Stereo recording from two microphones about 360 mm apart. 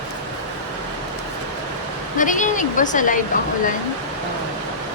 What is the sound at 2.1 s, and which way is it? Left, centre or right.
Speech, left.